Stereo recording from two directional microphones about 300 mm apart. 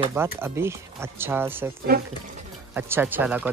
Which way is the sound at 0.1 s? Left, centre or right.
Centre.